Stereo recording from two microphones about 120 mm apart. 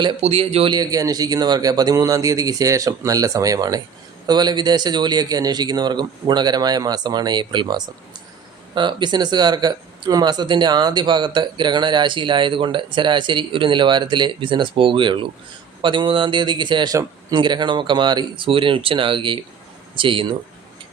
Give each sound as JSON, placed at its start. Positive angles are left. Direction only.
{"t": 0.2, "sound": "speech", "side_deg": -60}
{"t": 0.7, "sound": "speech", "side_deg": -35}